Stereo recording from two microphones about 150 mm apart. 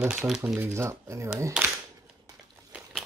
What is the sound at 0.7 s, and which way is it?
Speech, 20° right (ahead or behind).